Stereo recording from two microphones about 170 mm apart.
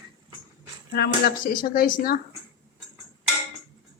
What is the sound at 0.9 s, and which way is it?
Speech, 65° left (ahead or behind).